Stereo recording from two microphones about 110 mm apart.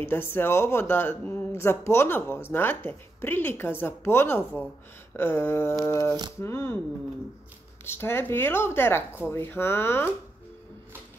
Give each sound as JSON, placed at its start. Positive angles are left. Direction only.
{"t": 0.0, "sound": "speech", "side_deg": 20}
{"t": 7.8, "sound": "speech", "side_deg": 20}